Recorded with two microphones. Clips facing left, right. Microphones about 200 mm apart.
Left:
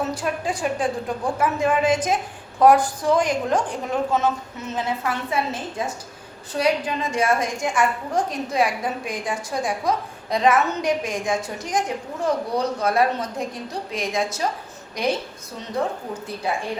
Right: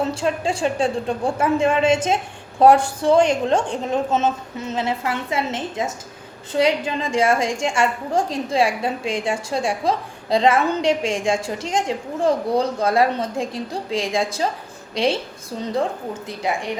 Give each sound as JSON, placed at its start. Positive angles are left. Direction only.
{"t": 0.0, "sound": "a woman's voice", "side_deg": -25}